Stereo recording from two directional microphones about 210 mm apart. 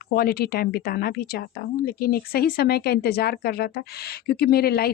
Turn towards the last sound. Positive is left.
turn(degrees=45)  # may be behind; listen again after turning